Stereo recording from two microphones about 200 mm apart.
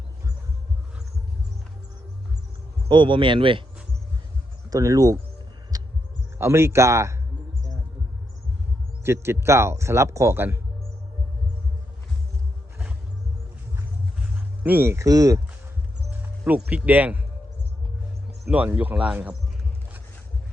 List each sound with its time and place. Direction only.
2.9 s speech: 25° right (ahead or behind)
4.7 s speech: 15° right (ahead or behind)
5.7 s heart sounds: 20° right (ahead or behind)
6.4 s speech: 15° right (ahead or behind)
9.0 s speech: 10° right (ahead or behind)
14.6 s speech: 10° right (ahead or behind)
16.2 s speech: 5° right (ahead or behind)
18.4 s speech: 10° right (ahead or behind)